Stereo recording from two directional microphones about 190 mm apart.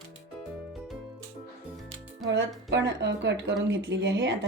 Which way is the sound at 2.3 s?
70° right (ahead or behind).